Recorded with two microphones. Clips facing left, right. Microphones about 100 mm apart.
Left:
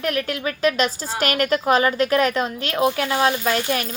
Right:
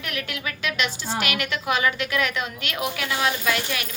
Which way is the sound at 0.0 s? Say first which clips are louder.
Left 8 dB; 40° left (ahead or behind).